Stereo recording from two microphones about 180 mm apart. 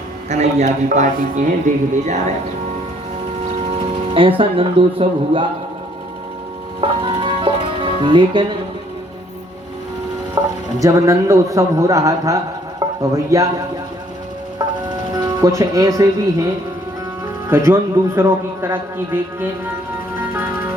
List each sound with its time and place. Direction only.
0.3 s a man's voice: 40° right (ahead or behind)
4.1 s speech: 30° right (ahead or behind)
7.0 s music: 25° right (ahead or behind)
10.4 s a man's voice: 20° right (ahead or behind)
15.1 s speech: 20° right (ahead or behind)
17.5 s a man's voice: 15° right (ahead or behind)